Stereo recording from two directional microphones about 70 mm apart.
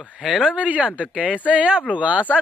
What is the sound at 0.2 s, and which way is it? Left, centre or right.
Speech, centre.